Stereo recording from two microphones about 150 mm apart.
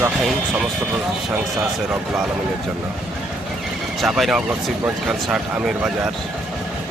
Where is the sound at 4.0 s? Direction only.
Centre (ahead or behind).